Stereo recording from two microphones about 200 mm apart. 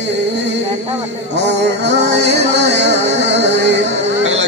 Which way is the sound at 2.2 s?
35° right (ahead or behind).